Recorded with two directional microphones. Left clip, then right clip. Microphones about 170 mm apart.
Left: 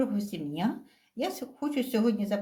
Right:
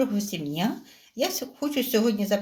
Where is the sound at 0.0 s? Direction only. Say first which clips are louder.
Right 4 dB; 45° right (ahead or behind).